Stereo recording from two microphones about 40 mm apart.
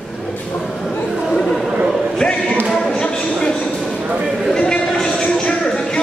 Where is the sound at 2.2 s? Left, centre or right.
Centre.